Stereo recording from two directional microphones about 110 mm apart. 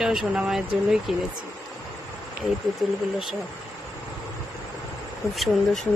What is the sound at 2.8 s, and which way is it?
Speech, 5° right (ahead or behind).